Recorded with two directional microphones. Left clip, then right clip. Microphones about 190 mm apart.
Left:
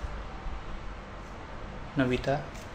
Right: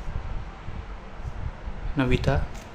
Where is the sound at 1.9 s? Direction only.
25° right (ahead or behind).